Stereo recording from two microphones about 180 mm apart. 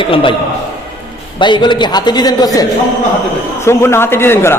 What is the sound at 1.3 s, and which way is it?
A man's voice, 25° left (ahead or behind).